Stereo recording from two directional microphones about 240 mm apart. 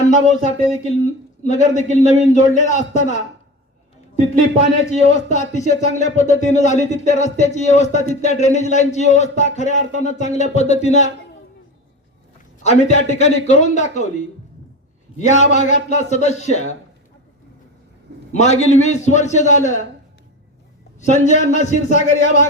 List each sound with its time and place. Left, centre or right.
0.1 s a man's voice: left
5.0 s speech: left
12.6 s speech: left
15.3 s speech: left
18.3 s speech: left
21.0 s a man's voice: left